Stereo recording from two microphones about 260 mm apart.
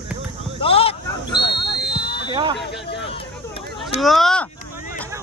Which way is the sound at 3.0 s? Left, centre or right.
Left.